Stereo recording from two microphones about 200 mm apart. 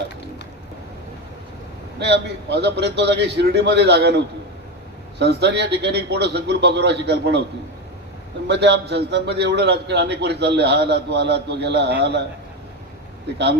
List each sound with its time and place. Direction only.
2.0 s a man's voice: 60° right (ahead or behind)
5.2 s a man's voice: 55° right (ahead or behind)
8.4 s a man's voice: 60° right (ahead or behind)